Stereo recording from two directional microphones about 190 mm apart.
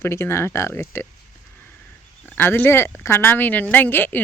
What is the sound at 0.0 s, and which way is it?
Speech, 15° left (ahead or behind).